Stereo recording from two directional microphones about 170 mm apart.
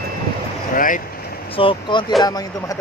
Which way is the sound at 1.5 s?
30° left (ahead or behind).